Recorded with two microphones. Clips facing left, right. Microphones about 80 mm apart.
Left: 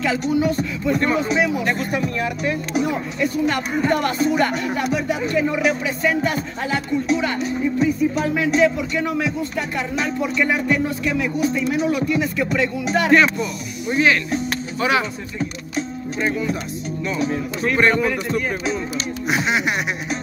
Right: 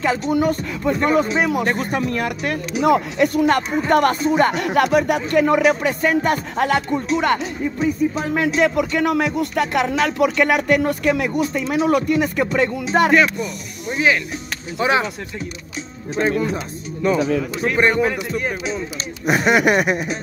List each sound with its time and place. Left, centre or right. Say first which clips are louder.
0.3 s speech: right 1 dB; right
2.8 s speech: right 9 dB; right
3.4 s speech: right 2 dB; right
4.3 s speech: right 1 dB; right
4.6 s speech: right 6 dB; right
13.1 s speech: left 1 dB; centre
14.8 s speech: right 2 dB; right
17.6 s speech: even; centre
19.2 s speech: right 6 dB; right